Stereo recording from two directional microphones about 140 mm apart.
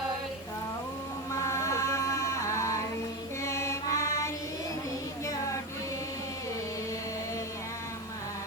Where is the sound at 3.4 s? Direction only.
20° left (ahead or behind).